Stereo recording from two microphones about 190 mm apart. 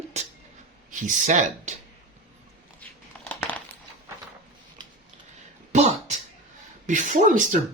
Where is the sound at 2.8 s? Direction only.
10° left (ahead or behind).